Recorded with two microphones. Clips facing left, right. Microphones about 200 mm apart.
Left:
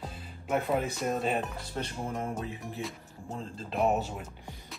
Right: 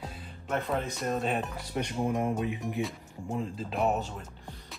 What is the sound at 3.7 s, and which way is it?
Speech, 5° left (ahead or behind).